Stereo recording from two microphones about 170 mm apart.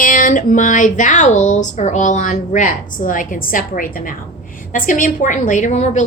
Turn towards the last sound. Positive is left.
turn(degrees=40)  # may be behind; listen again after turning